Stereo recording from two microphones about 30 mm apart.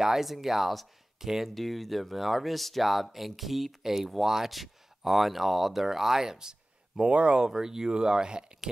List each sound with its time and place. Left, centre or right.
0.0 s speech: centre
1.5 s speech: centre
7.1 s speech: right
7.3 s speech: right